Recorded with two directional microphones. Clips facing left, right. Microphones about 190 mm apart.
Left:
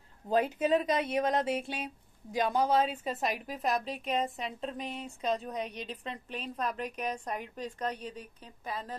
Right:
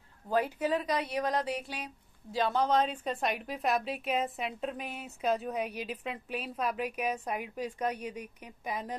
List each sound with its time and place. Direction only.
0.3 s speech: 20° left (ahead or behind)
2.3 s a woman's voice: 15° left (ahead or behind); by 8.9 s 15° right (ahead or behind)